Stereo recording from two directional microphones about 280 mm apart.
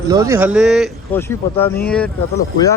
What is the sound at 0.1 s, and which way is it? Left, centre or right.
Speech, centre.